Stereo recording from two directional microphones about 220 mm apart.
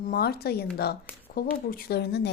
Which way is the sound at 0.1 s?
45° left (ahead or behind).